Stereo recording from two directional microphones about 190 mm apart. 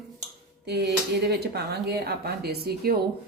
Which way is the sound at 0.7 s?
60° right (ahead or behind).